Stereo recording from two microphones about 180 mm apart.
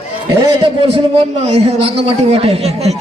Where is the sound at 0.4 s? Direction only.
35° right (ahead or behind).